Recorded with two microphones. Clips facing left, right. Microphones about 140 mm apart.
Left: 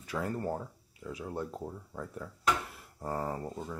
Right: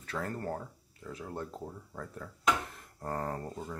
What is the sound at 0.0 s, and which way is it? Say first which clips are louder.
Speech: left 2 dB; 10° left (ahead or behind).